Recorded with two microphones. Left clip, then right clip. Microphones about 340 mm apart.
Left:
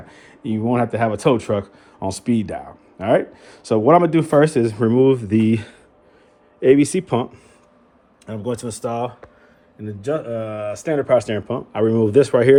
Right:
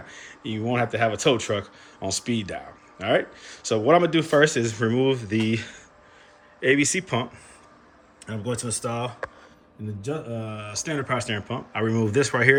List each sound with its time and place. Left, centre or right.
0.1 s speech: centre
8.3 s speech: centre
10.0 s speech: centre
11.1 s speech: centre